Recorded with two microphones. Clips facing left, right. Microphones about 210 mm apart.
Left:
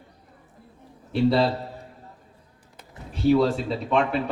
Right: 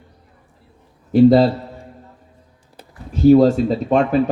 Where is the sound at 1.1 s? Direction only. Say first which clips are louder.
Right 10 dB; 45° right (ahead or behind).